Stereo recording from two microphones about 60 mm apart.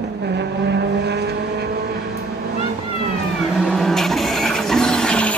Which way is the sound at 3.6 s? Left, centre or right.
Centre.